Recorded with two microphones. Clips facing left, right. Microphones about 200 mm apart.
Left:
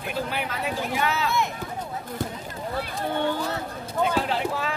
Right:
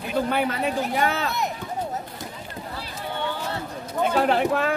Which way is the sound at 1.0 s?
45° right (ahead or behind).